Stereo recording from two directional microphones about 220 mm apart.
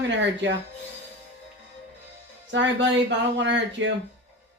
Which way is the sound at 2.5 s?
55° right (ahead or behind).